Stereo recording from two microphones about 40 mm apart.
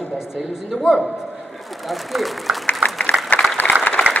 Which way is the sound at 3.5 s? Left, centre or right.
Left.